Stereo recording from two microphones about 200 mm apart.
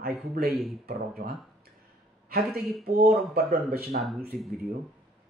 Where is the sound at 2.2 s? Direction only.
50° right (ahead or behind).